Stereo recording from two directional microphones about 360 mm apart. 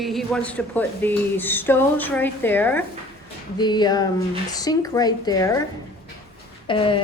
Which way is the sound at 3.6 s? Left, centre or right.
Centre.